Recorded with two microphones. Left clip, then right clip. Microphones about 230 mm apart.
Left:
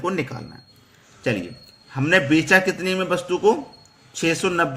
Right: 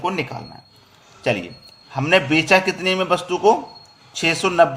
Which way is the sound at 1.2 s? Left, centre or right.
Centre.